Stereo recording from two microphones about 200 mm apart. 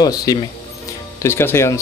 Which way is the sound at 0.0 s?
20° left (ahead or behind).